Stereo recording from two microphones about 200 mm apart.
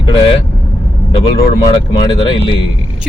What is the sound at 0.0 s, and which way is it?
Vehicle, 25° left (ahead or behind).